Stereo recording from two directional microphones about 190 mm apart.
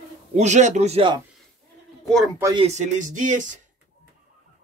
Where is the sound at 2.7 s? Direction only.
40° right (ahead or behind).